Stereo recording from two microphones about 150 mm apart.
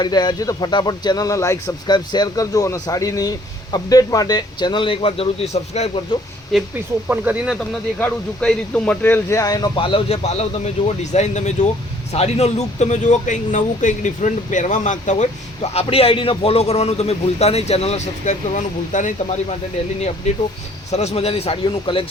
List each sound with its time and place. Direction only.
0.0 s a man's voice: 30° left (ahead or behind)
6.5 s speech: centre (ahead or behind)
7.9 s a man's voice: 10° left (ahead or behind); by 15.3 s 55° left (ahead or behind)
15.7 s a man's voice: 40° left (ahead or behind)